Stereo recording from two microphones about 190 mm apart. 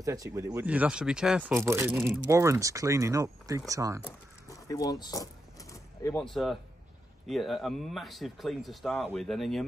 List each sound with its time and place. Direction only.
0.0 s speech: 20° right (ahead or behind)
1.6 s speech: 15° right (ahead or behind)
4.0 s a sound: 15° left (ahead or behind)
5.0 s keys jangling: 20° left (ahead or behind)
6.2 s speech: centre (ahead or behind)